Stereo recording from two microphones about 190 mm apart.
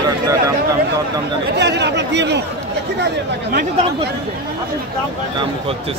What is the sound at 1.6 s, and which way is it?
Speech, 65° right (ahead or behind).